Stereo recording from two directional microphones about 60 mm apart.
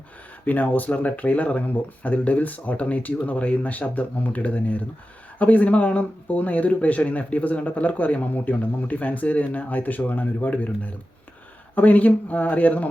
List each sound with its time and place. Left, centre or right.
0.4 s speech: left
11.7 s speech: left